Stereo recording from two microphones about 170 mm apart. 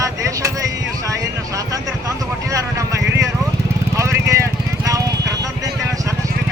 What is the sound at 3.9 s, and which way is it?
Vehicle, 15° right (ahead or behind).